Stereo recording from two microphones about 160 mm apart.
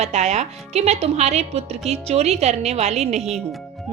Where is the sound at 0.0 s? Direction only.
45° right (ahead or behind).